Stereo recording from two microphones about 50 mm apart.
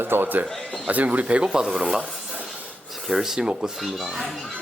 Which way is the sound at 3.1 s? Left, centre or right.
Centre.